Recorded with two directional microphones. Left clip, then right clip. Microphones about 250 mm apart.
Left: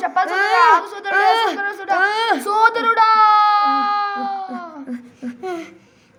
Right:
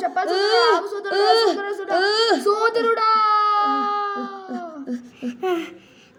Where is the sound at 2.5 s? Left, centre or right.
Centre.